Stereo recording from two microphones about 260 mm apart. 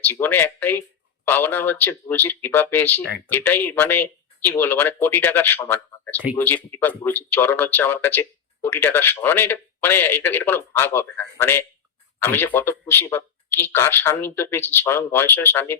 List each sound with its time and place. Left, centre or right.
0.0 s speech: centre